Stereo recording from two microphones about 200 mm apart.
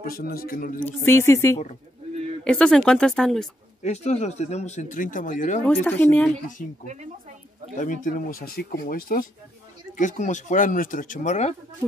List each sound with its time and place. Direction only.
0.0 s speech: 45° left (ahead or behind)
0.8 s speech: 10° left (ahead or behind)
3.8 s speech: 35° left (ahead or behind)
5.7 s speech: 10° left (ahead or behind)
7.7 s speech: 40° left (ahead or behind)